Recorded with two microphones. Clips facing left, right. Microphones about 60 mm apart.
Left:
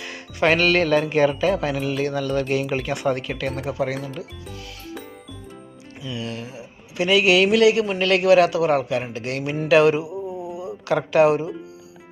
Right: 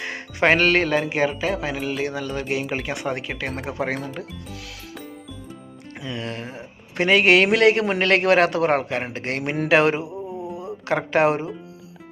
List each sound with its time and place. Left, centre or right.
0.0 s music: right
0.9 s speech: centre
3.7 s a man's voice: right
6.0 s a man's voice: right
10.1 s mantra: centre
10.6 s speech: right